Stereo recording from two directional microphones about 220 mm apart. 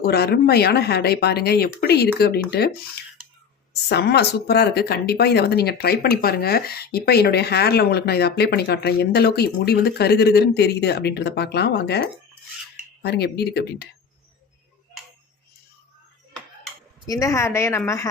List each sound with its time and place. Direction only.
0.0 s speech: 45° left (ahead or behind)
3.7 s speech: 50° left (ahead or behind)
17.1 s a woman's voice: 15° left (ahead or behind)